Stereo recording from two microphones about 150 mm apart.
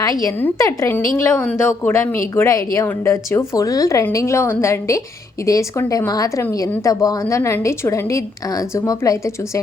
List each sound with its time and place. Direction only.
0.0 s a woman's voice: 25° left (ahead or behind)